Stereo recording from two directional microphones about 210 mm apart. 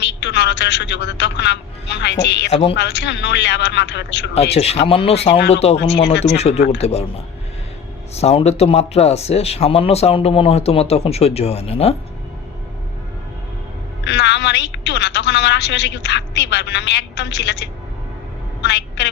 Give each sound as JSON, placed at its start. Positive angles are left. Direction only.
{"t": 0.0, "sound": "a woman's voice", "side_deg": 55}
{"t": 2.5, "sound": "speech", "side_deg": 25}
{"t": 2.7, "sound": "a woman's voice", "side_deg": 55}
{"t": 4.5, "sound": "speech", "side_deg": 30}
{"t": 5.7, "sound": "a woman's voice", "side_deg": 55}
{"t": 6.3, "sound": "speech", "side_deg": 30}
{"t": 8.1, "sound": "speech", "side_deg": 30}
{"t": 14.0, "sound": "a woman's voice", "side_deg": 55}